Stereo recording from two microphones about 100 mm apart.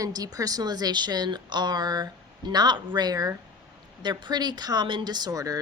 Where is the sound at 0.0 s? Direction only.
40° right (ahead or behind).